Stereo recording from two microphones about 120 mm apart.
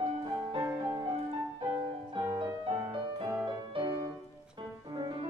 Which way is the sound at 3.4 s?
45° right (ahead or behind).